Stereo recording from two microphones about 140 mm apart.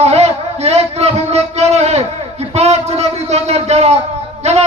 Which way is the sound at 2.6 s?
50° right (ahead or behind).